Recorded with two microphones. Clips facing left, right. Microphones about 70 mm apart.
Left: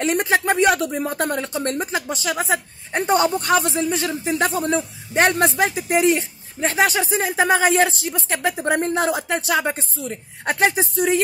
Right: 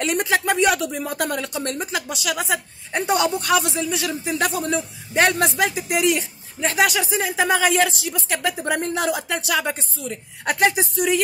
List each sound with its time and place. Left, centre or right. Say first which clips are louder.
0.0 s a woman's voice: left 2 dB; left